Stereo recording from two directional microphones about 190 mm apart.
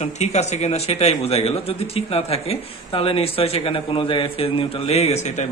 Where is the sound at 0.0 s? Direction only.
35° left (ahead or behind).